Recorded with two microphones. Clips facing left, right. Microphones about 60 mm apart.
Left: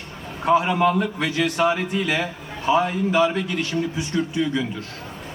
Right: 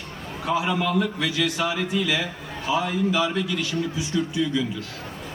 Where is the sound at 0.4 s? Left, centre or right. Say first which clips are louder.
Left 6 dB; left.